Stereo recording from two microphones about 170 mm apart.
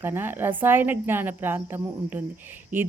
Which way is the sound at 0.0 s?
15° right (ahead or behind).